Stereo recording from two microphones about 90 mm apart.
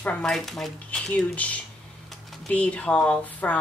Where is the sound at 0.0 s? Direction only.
10° left (ahead or behind).